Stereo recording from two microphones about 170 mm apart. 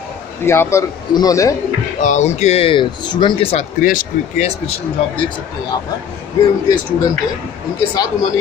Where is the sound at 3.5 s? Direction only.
50° left (ahead or behind).